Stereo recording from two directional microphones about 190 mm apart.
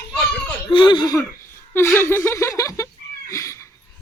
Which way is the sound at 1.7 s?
15° left (ahead or behind).